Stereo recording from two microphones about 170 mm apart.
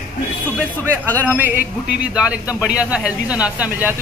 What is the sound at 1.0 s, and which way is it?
Speech, 10° left (ahead or behind).